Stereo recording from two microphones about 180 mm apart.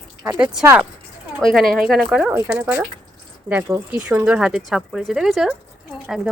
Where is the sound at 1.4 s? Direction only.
Centre (ahead or behind).